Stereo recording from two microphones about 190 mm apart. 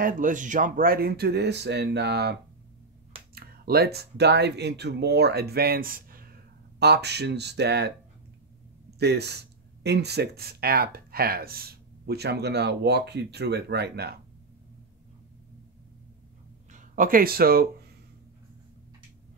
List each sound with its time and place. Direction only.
0.0 s speech: 45° right (ahead or behind); by 2.3 s 60° right (ahead or behind)
3.3 s speech: 55° right (ahead or behind)
6.8 s speech: 60° right (ahead or behind)
9.0 s speech: 60° right (ahead or behind)
16.7 s speech: 45° right (ahead or behind)